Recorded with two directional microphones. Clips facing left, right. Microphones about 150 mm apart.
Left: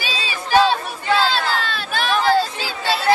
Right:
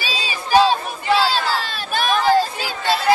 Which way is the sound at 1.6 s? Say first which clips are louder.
Even; 40° right (ahead or behind).